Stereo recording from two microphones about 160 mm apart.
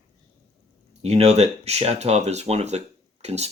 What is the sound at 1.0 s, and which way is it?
Speech, 40° right (ahead or behind).